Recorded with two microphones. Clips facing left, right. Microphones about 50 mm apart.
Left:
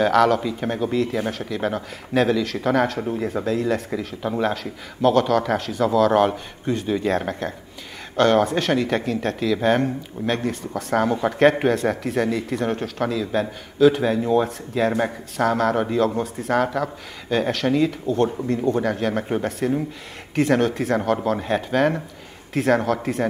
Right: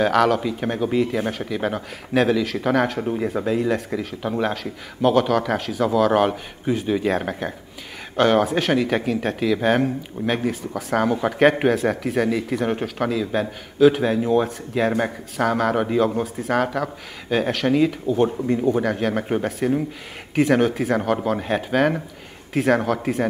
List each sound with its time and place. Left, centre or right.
0.0 s speech: centre